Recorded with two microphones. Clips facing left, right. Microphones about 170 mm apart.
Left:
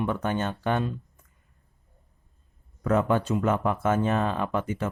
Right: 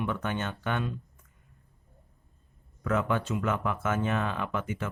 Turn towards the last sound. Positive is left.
turn(degrees=35)  # may be behind; listen again after turning